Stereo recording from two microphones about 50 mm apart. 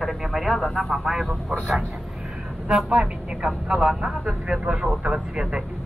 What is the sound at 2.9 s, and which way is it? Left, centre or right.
Speech, centre.